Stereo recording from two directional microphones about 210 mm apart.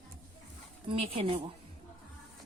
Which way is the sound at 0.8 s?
25° right (ahead or behind).